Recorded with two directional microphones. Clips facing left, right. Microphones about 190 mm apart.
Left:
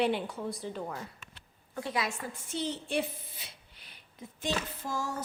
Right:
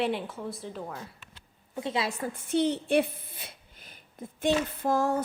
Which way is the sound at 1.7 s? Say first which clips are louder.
Right 3 dB; 25° right (ahead or behind).